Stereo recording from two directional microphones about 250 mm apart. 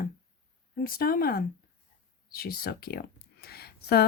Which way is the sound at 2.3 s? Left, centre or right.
Left.